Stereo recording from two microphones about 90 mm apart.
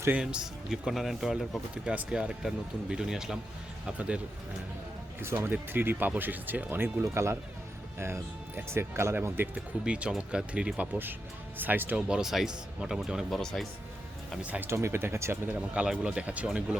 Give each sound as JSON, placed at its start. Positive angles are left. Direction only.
{"t": 0.1, "sound": "speech", "side_deg": -10}
{"t": 1.7, "sound": "speech", "side_deg": -10}
{"t": 5.2, "sound": "speech", "side_deg": -25}
{"t": 9.8, "sound": "speech", "side_deg": -10}
{"t": 14.4, "sound": "speech", "side_deg": -15}
{"t": 14.7, "sound": "speech", "side_deg": -30}
{"t": 15.7, "sound": "speech", "side_deg": -10}